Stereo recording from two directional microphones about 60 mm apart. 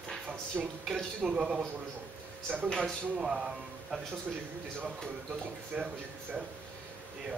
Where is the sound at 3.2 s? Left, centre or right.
Centre.